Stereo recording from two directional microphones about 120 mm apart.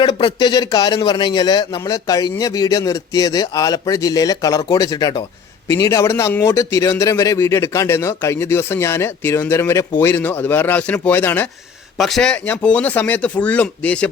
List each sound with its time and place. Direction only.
0.1 s a man's voice: 35° left (ahead or behind); by 11.4 s 15° left (ahead or behind)
11.9 s speech: centre (ahead or behind)